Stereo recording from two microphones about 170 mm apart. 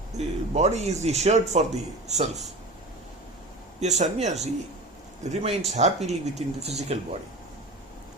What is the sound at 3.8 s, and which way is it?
Speech, 40° right (ahead or behind).